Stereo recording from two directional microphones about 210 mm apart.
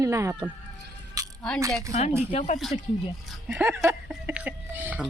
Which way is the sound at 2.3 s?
35° left (ahead or behind).